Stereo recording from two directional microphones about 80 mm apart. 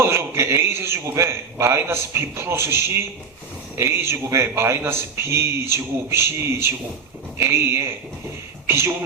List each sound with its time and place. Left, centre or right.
0.0 s speech: right